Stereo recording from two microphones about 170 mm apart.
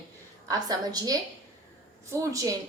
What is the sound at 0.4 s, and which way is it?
A woman's voice, 20° right (ahead or behind).